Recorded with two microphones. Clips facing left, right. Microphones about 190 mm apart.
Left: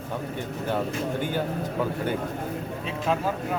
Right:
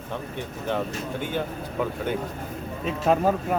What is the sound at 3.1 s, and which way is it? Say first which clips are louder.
Speech: right 5 dB; 50° right (ahead or behind).